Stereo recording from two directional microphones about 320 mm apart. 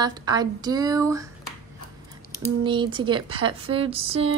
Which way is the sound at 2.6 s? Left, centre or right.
Centre.